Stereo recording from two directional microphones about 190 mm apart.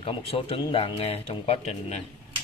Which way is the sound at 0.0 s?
30° left (ahead or behind).